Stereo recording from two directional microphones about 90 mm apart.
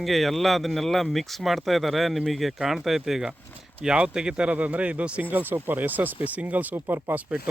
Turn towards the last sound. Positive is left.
turn(degrees=-15)  # may be behind; listen again after turning